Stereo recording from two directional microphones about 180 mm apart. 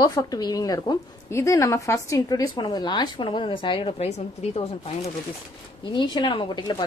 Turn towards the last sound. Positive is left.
turn(degrees=25)  # may be behind; listen again after turning